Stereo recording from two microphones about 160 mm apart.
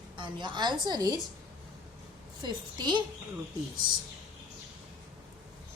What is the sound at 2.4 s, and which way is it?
Speech, 30° right (ahead or behind).